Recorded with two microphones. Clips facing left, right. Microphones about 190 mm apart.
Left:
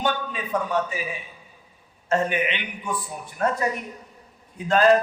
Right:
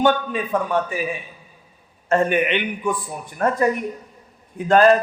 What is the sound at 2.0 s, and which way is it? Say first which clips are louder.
A man's voice: right 5 dB; 55° right (ahead or behind).